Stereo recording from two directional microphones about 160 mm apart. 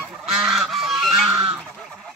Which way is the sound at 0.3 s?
Centre (ahead or behind).